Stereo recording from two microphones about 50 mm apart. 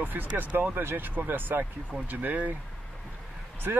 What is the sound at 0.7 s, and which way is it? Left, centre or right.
Speech, right.